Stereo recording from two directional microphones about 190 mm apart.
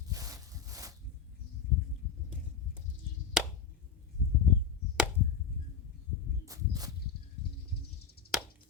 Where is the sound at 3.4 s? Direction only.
Centre (ahead or behind).